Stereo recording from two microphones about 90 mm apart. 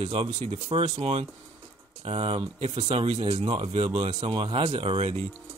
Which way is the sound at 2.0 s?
90° right.